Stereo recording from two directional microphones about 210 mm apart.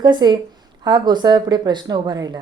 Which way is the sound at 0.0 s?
20° right (ahead or behind).